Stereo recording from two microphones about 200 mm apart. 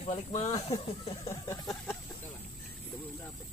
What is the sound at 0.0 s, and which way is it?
Speech, 30° left (ahead or behind).